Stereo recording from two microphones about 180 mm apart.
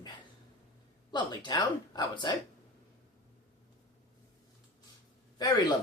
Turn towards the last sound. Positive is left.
turn(degrees=20)  # may be behind; listen again after turning